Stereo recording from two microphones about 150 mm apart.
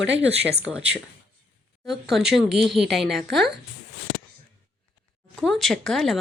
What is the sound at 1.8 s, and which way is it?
Speech, centre (ahead or behind).